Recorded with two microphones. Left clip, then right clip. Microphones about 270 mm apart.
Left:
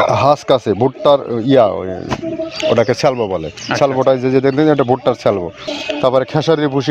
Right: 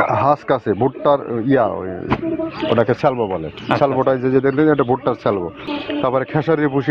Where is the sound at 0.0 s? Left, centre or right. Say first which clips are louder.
Left 4 dB; left.